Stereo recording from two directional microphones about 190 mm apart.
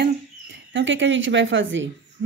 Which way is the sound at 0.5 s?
75° right (ahead or behind).